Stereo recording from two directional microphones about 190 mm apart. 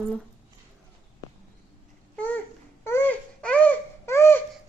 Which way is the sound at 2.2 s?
10° left (ahead or behind).